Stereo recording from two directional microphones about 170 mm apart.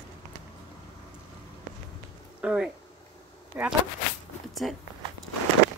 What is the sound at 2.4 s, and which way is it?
Speech, 5° right (ahead or behind).